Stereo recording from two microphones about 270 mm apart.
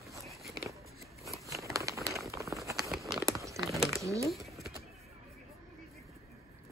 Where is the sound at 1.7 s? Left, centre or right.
Centre.